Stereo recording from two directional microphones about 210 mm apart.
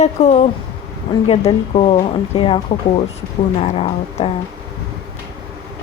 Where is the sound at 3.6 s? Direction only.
30° left (ahead or behind).